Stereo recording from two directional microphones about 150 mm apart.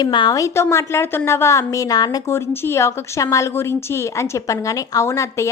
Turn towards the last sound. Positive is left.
turn(degrees=20)  # may be behind; listen again after turning